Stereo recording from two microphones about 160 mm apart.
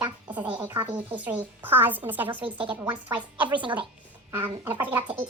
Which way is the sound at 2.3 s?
30° right (ahead or behind).